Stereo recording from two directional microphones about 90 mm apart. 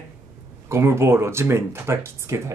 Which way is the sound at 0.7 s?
30° right (ahead or behind).